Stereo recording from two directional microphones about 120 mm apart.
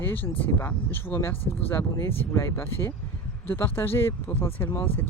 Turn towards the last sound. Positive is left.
turn(degrees=20)  # may be behind; listen again after turning